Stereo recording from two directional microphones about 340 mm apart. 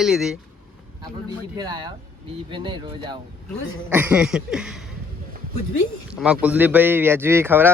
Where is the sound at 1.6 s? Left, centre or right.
Centre.